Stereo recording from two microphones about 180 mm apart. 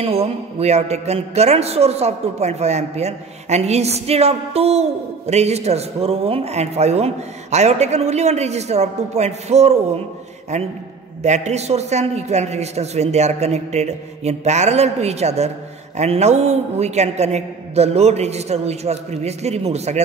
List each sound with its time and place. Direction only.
0.0 s speech: 35° right (ahead or behind)